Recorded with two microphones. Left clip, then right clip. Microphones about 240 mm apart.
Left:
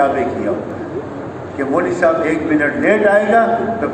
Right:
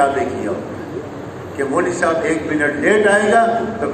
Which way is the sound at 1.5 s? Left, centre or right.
Right.